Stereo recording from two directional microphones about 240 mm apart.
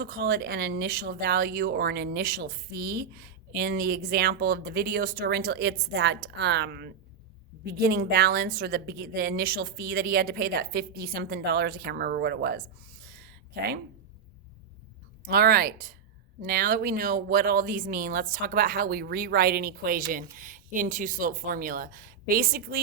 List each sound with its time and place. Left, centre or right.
0.0 s speech: right
13.1 s a sound: right
15.3 s speech: right